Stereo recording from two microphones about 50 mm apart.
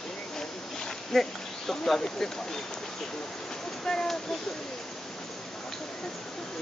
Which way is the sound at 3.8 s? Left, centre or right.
Centre.